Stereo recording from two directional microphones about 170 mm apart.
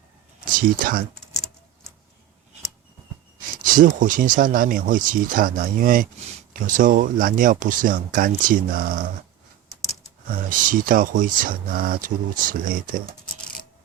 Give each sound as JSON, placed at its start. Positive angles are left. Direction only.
{"t": 0.4, "sound": "speech", "side_deg": -55}
{"t": 1.1, "sound": "a sound", "side_deg": 5}
{"t": 3.6, "sound": "speech", "side_deg": -55}
{"t": 10.5, "sound": "speech", "side_deg": -55}